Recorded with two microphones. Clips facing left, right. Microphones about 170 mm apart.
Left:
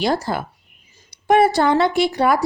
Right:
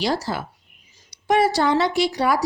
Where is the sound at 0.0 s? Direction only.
50° left (ahead or behind).